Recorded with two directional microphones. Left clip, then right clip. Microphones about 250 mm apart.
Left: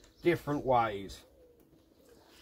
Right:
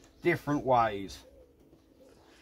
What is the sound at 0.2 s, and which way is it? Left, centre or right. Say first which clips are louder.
Speech: right 1 dB; centre.